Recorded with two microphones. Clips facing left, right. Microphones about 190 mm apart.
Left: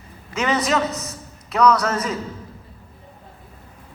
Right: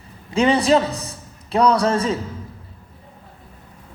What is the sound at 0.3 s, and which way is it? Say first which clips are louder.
A man's voice: right 5 dB; 30° right (ahead or behind).